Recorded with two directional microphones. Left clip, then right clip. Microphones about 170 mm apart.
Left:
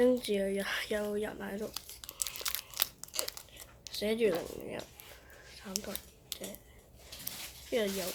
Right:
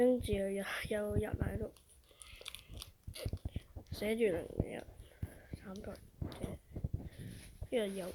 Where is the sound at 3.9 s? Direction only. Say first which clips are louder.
Left 4 dB; 20° right (ahead or behind).